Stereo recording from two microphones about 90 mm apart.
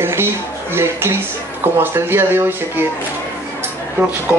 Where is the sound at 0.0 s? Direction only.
25° right (ahead or behind).